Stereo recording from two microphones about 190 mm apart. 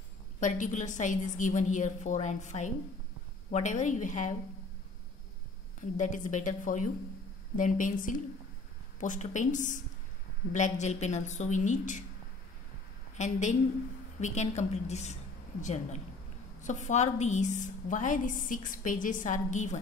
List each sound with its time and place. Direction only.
0.4 s a woman's voice: 40° left (ahead or behind)
5.8 s a woman's voice: 40° left (ahead or behind)
13.2 s a woman's voice: 40° left (ahead or behind)